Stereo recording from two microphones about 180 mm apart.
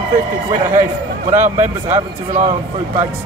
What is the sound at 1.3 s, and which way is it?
Speech, 40° right (ahead or behind).